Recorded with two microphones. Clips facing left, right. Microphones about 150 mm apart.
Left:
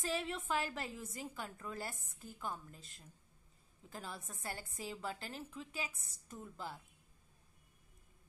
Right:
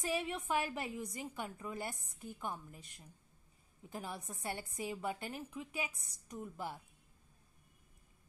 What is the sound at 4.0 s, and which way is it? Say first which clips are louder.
Speech: right 3 dB; centre (ahead or behind).